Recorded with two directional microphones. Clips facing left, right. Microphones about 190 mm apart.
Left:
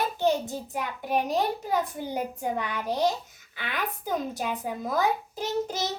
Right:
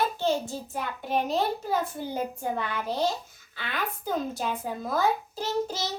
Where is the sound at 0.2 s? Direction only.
20° left (ahead or behind).